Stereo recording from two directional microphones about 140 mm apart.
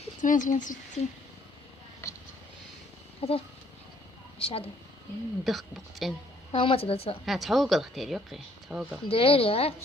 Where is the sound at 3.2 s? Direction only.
45° left (ahead or behind).